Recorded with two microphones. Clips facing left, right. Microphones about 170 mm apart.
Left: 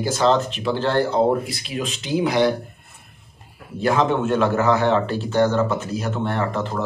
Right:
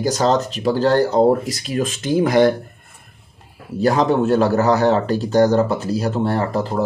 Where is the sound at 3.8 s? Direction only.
40° right (ahead or behind).